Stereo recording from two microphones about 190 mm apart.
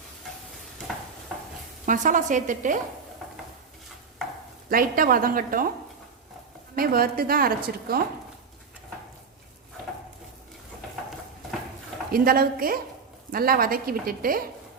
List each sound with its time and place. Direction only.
1.9 s a woman's voice: 45° right (ahead or behind)
4.7 s a woman's voice: 50° right (ahead or behind)
6.7 s a woman's voice: 50° right (ahead or behind)
12.1 s a woman's voice: 50° right (ahead or behind)